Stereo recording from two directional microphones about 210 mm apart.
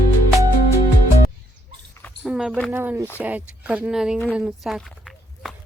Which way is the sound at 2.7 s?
10° right (ahead or behind).